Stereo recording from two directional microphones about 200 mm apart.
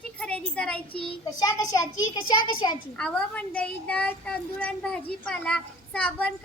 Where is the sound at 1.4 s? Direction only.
15° left (ahead or behind).